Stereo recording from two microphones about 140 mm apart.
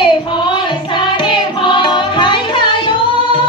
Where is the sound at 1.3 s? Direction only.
35° left (ahead or behind).